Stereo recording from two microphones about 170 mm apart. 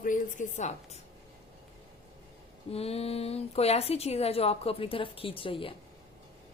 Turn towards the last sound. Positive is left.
turn(degrees=30)  # may be behind; listen again after turning